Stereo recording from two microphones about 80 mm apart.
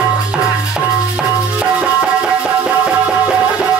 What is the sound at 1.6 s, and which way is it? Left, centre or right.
Music, centre.